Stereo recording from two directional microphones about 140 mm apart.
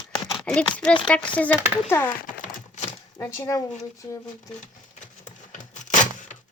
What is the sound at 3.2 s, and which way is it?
Speech, 20° left (ahead or behind).